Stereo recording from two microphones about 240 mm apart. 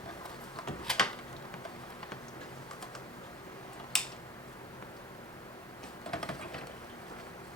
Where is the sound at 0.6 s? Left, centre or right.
Centre.